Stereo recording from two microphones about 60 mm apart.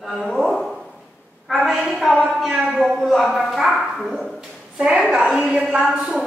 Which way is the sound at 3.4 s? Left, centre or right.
Centre.